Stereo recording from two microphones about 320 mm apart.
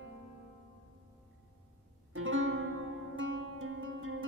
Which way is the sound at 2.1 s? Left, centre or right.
Right.